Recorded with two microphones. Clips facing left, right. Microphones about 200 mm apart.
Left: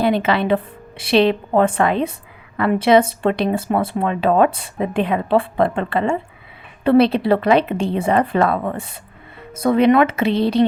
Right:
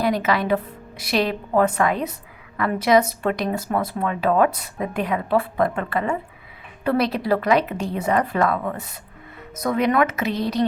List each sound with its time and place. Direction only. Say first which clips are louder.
0.0 s speech: left 4 dB; 30° left (ahead or behind)